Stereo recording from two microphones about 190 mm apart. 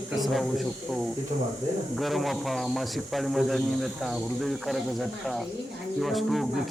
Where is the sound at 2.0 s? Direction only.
Centre (ahead or behind).